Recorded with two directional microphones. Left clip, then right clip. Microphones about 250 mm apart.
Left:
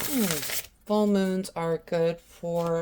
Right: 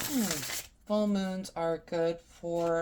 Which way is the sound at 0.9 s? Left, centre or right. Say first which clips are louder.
Left 6 dB; left.